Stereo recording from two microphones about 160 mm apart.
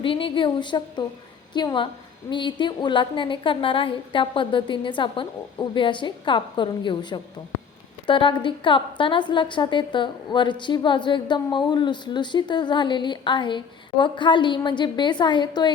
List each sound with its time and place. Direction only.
0.0 s a woman's voice: 35° left (ahead or behind)